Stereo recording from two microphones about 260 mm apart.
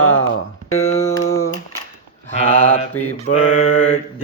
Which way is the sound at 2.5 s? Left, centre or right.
Left.